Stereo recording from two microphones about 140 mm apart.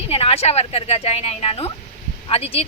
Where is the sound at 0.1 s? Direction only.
45° left (ahead or behind).